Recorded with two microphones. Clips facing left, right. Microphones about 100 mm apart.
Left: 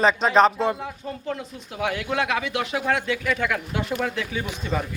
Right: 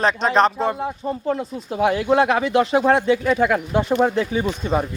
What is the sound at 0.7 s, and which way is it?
Speech, 30° right (ahead or behind).